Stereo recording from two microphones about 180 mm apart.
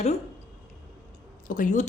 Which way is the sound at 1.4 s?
50° left (ahead or behind).